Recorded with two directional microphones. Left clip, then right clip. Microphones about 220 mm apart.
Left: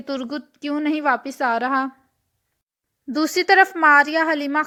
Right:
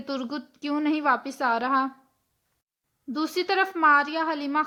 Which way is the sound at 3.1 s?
25° left (ahead or behind).